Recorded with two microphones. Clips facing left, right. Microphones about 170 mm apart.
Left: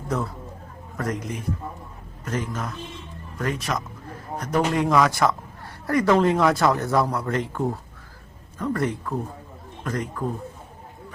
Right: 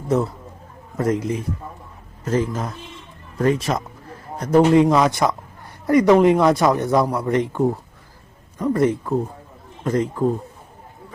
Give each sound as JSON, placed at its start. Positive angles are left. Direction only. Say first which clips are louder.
{"t": 0.9, "sound": "a man's voice", "louder": "right 8 dB", "side_deg": -25}
{"t": 2.2, "sound": "speech", "louder": "right 7 dB", "side_deg": -30}